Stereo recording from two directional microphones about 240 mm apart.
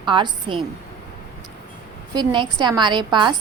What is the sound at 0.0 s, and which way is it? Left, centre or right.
Speech, centre.